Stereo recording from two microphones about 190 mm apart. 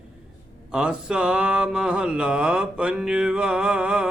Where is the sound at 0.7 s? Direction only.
5° right (ahead or behind).